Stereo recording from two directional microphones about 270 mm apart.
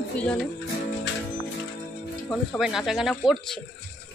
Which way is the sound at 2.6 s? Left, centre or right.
Centre.